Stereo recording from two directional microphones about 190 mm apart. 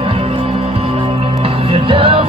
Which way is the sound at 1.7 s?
30° right (ahead or behind).